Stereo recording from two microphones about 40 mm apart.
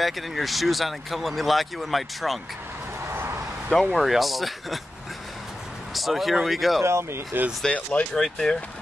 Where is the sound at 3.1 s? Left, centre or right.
Right.